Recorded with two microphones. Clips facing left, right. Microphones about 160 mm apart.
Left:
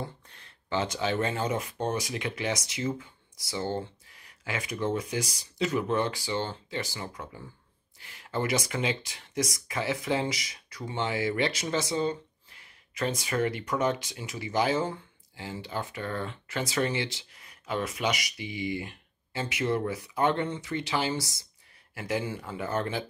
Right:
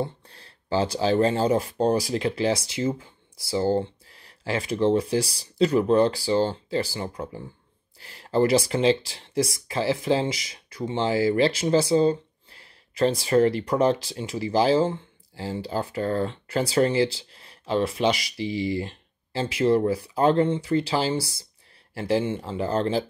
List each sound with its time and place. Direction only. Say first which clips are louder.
0.0 s speech: right 9 dB; 35° right (ahead or behind)